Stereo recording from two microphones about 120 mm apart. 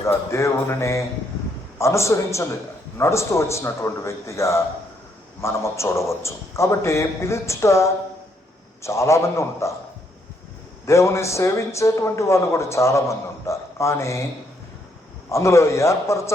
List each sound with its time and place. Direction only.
0.0 s speech: 20° left (ahead or behind)
10.8 s speech: 25° left (ahead or behind)
15.3 s speech: 25° left (ahead or behind)